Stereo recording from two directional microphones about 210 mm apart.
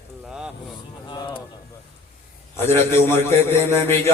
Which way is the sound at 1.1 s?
20° left (ahead or behind).